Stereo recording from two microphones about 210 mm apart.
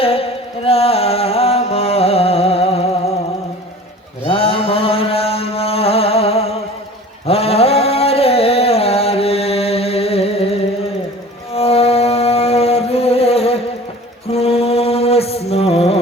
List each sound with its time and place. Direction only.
0.0 s music: 25° left (ahead or behind)
4.2 s mantra: 25° left (ahead or behind)
11.5 s music: 30° left (ahead or behind)
14.3 s mantra: 30° left (ahead or behind)